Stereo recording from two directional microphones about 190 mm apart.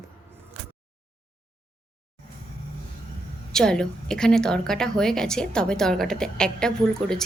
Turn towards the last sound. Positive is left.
turn(degrees=5)  # may be behind; listen again after turning